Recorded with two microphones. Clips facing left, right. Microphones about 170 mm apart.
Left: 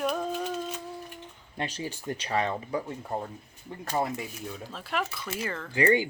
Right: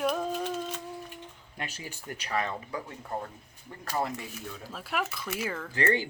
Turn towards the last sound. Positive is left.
turn(degrees=15)  # may be behind; listen again after turning